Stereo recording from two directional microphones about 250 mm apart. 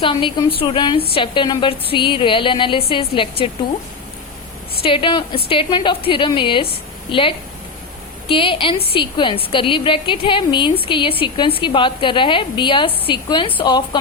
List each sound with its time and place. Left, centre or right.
0.0 s a woman's voice: centre
4.8 s a woman's voice: centre